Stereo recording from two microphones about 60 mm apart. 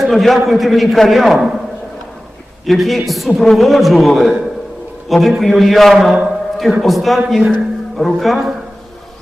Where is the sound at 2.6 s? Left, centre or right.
Centre.